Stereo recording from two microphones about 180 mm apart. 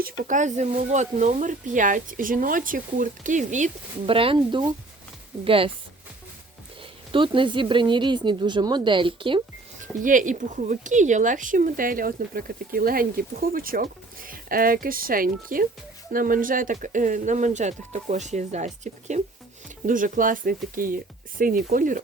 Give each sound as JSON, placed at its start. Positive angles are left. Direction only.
{"t": 0.0, "sound": "speech", "side_deg": -45}
{"t": 7.1, "sound": "speech", "side_deg": -30}
{"t": 9.8, "sound": "speech", "side_deg": -45}